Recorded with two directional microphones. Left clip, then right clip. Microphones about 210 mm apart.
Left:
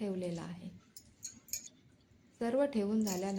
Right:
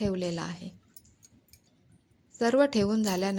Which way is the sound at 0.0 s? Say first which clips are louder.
Right 8 dB; 35° right (ahead or behind).